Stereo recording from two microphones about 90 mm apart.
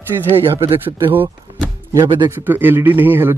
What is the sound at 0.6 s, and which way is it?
Speech, 80° right.